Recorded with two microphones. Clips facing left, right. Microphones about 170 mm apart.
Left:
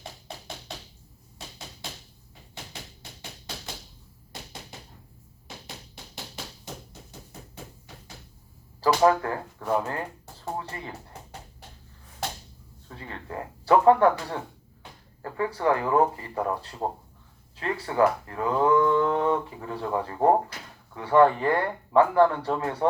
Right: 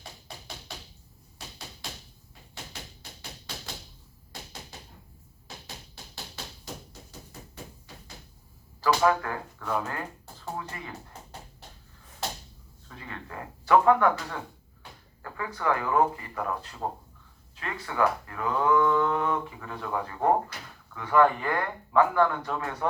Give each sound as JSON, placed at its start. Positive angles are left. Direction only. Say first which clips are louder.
{"t": 8.8, "sound": "speech", "louder": "left 3 dB", "side_deg": 30}
{"t": 13.0, "sound": "speech", "louder": "left 4 dB", "side_deg": 30}